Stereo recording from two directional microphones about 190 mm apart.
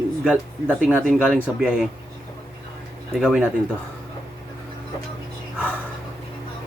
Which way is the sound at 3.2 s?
5° right (ahead or behind).